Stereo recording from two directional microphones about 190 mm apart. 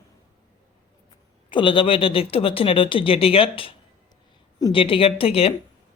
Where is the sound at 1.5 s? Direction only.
25° left (ahead or behind).